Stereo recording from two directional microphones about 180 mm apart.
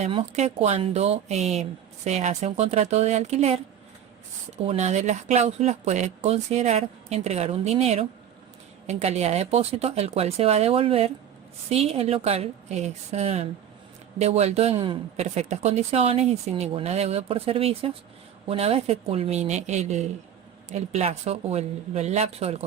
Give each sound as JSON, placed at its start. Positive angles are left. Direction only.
{"t": 0.0, "sound": "speech", "side_deg": -35}